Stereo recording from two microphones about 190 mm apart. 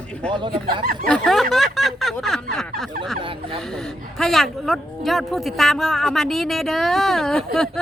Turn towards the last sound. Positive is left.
turn(degrees=5)  # may be behind; listen again after turning